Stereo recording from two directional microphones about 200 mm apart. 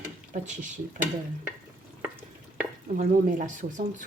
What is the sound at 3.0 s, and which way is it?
Speech, 40° right (ahead or behind).